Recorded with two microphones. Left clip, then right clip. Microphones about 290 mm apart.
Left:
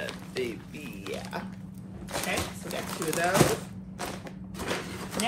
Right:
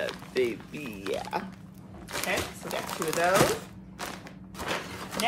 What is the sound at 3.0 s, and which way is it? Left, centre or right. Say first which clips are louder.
Speech: even; centre.